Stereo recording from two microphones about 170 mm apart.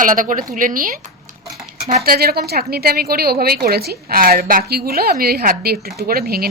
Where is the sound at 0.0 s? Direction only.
50° right (ahead or behind).